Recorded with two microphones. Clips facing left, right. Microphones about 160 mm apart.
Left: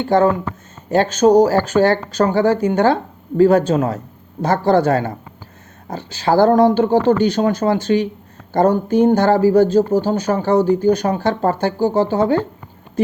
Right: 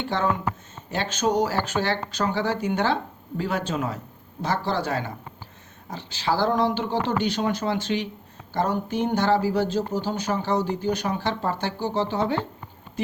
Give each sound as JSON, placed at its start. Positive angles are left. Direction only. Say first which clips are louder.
{"t": 0.0, "sound": "speech", "louder": "left 10 dB", "side_deg": 45}